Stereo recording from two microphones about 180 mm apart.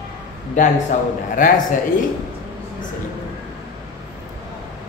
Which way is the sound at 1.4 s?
50° left (ahead or behind).